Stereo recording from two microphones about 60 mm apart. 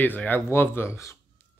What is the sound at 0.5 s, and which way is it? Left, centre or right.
Speech, left.